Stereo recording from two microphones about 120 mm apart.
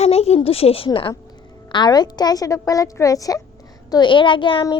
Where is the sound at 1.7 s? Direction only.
35° left (ahead or behind).